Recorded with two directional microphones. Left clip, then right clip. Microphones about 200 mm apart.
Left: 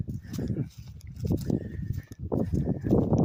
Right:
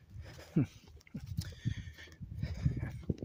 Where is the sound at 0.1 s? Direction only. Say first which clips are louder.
Left 12 dB; 60° left (ahead or behind).